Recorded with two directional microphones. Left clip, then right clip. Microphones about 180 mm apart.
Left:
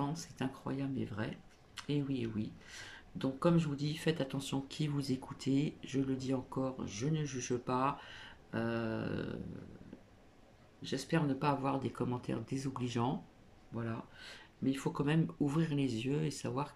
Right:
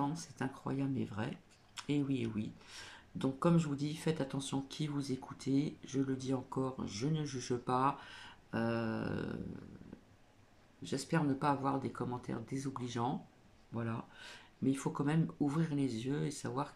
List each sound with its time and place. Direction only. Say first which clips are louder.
0.0 s speech: right 1 dB; centre (ahead or behind)
10.8 s speech: left 1 dB; 5° right (ahead or behind)